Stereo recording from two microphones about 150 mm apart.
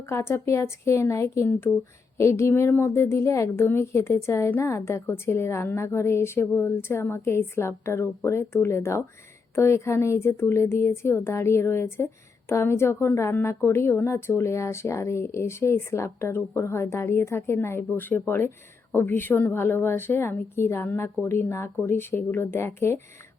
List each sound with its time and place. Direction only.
0.0 s a woman's voice: 20° left (ahead or behind)